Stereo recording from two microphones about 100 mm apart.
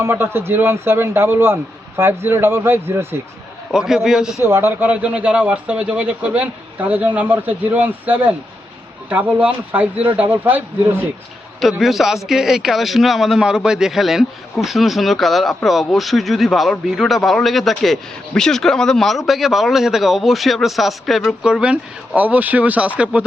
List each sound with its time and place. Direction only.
0.0 s a man's voice: 25° right (ahead or behind)
3.7 s speech: 5° right (ahead or behind)
4.4 s a man's voice: 25° right (ahead or behind)
11.8 s speech: centre (ahead or behind)